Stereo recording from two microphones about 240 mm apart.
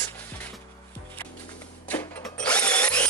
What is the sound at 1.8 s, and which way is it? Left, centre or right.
Drill, centre.